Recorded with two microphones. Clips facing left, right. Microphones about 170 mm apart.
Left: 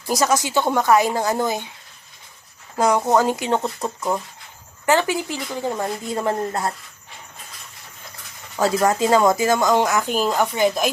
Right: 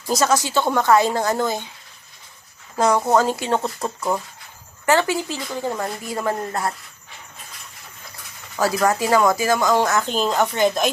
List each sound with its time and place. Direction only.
0.1 s a woman's voice: 15° left (ahead or behind)
2.7 s a woman's voice: 10° left (ahead or behind)
8.5 s speech: 20° left (ahead or behind); by 10.8 s 5° left (ahead or behind)